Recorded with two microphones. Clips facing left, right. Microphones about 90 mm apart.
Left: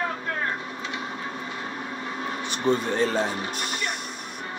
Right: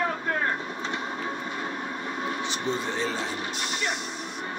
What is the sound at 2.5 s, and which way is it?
Speech, 50° left (ahead or behind).